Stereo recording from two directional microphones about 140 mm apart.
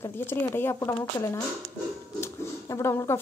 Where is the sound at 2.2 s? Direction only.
20° left (ahead or behind).